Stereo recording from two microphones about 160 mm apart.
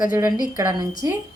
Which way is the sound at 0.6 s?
20° right (ahead or behind).